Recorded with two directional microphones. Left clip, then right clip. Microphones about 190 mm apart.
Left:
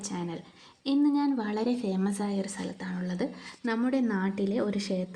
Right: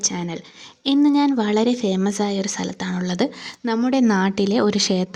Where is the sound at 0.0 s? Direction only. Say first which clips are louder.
Right 11 dB; 40° right (ahead or behind).